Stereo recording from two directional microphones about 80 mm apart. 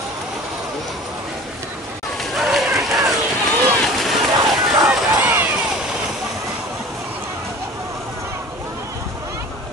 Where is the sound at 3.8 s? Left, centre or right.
Centre.